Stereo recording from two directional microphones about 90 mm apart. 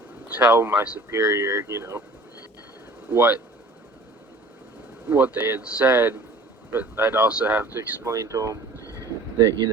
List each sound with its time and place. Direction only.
0.5 s speech: 20° right (ahead or behind)
1.2 s speech: 35° right (ahead or behind)
3.1 s speech: 20° right (ahead or behind)
5.0 s speech: 20° right (ahead or behind); by 8.5 s 35° right (ahead or behind)
9.0 s a sound: 35° right (ahead or behind)